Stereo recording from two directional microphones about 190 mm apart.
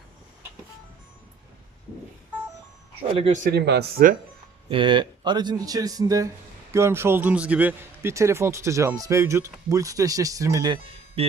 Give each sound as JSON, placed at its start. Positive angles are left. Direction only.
{"t": 3.3, "sound": "speech", "side_deg": -50}
{"t": 4.7, "sound": "a man's voice", "side_deg": -25}